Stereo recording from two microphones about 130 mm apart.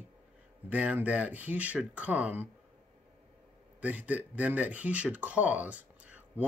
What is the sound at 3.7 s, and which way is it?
Speech, 10° right (ahead or behind).